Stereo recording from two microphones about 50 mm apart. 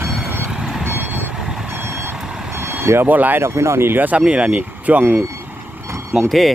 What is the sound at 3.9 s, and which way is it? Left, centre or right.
Speech, right.